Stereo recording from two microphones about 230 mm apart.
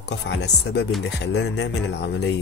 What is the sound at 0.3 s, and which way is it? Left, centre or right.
Speech, left.